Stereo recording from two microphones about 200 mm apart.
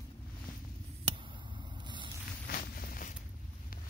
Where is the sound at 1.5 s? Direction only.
25° right (ahead or behind).